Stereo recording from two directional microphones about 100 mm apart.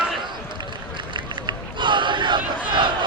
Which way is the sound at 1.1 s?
50° right (ahead or behind).